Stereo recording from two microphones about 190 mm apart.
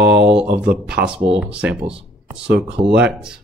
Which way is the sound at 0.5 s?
5° right (ahead or behind).